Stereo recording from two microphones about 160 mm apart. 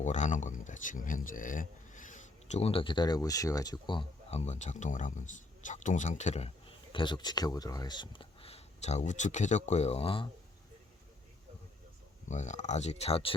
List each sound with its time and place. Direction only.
0.0 s speech: 45° left (ahead or behind)
6.9 s speech: 30° left (ahead or behind)
12.3 s speech: 50° left (ahead or behind)